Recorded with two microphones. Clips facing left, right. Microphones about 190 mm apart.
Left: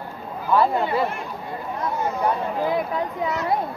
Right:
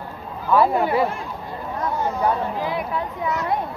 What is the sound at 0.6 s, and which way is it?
Speech, 10° right (ahead or behind).